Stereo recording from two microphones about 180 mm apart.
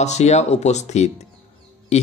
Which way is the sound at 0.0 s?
40° left (ahead or behind).